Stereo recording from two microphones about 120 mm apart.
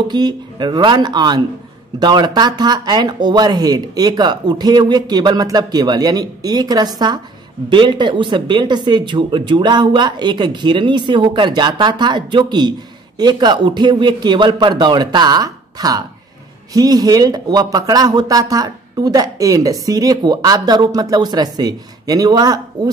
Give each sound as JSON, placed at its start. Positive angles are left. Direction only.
{"t": 0.1, "sound": "speech", "side_deg": -35}